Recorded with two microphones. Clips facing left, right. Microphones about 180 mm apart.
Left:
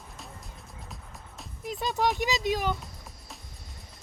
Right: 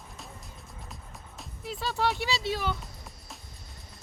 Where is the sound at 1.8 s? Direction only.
15° left (ahead or behind).